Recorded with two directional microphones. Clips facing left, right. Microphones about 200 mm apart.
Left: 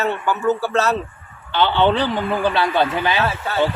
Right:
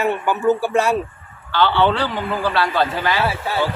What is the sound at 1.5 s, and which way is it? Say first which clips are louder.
A man's voice: even; 20° left (ahead or behind).